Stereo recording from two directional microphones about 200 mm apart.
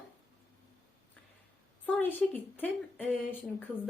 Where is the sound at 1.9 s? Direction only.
10° left (ahead or behind).